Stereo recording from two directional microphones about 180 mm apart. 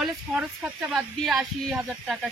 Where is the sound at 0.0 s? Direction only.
Centre (ahead or behind).